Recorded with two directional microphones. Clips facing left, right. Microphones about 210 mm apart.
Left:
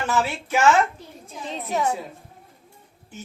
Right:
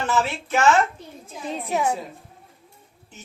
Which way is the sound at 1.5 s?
10° right (ahead or behind).